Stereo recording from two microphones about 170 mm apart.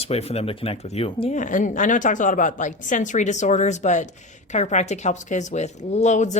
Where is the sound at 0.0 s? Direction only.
35° left (ahead or behind).